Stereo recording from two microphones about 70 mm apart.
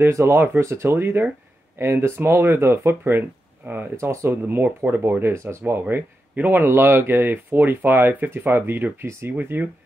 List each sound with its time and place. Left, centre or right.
0.0 s speech: right
3.9 s speech: right